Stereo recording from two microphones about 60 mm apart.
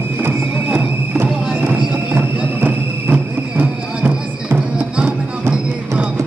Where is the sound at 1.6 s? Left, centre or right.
Right.